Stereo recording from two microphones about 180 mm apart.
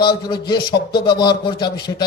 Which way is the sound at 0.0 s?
25° left (ahead or behind).